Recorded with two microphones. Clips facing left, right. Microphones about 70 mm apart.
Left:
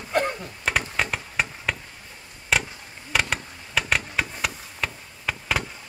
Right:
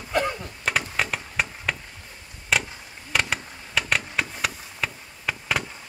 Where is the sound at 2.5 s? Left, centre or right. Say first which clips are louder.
Even; centre.